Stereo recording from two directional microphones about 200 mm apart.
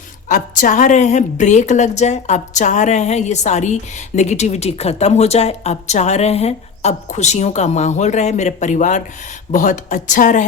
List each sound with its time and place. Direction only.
0.3 s a woman's voice: 40° left (ahead or behind)